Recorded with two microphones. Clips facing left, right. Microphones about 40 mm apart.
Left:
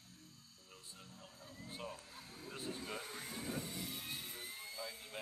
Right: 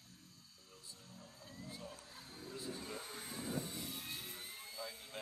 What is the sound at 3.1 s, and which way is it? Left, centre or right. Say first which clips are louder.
Vehicle: right 1 dB; centre.